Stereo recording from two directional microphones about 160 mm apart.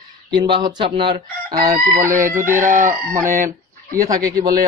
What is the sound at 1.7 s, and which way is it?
Speech, 20° right (ahead or behind).